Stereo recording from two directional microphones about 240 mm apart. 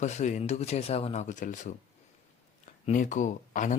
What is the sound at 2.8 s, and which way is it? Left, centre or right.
Speech, left.